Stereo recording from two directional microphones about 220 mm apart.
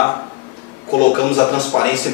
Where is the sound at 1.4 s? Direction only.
20° left (ahead or behind).